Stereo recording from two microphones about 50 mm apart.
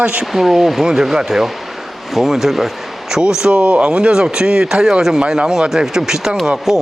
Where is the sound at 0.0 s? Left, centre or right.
Right.